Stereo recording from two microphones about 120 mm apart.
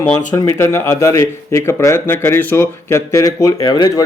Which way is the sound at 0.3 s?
25° left (ahead or behind).